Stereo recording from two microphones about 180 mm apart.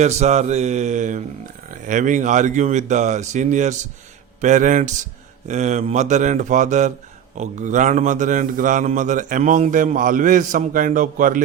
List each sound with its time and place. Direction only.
0.0 s a man's voice: 40° right (ahead or behind)